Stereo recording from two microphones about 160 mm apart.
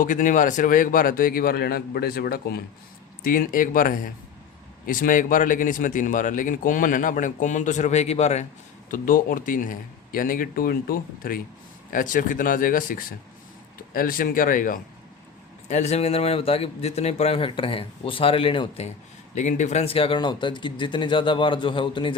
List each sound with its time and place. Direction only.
0.0 s speech: 55° left (ahead or behind); by 2.6 s 70° left (ahead or behind)
3.2 s speech: 60° left (ahead or behind); by 8.4 s 45° left (ahead or behind)
8.9 s speech: 60° left (ahead or behind)
15.7 s a man's voice: 45° left (ahead or behind)
19.3 s a man's voice: 50° left (ahead or behind); by 22.1 s 30° left (ahead or behind)